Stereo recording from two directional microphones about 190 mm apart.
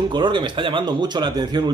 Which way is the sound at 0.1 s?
25° right (ahead or behind).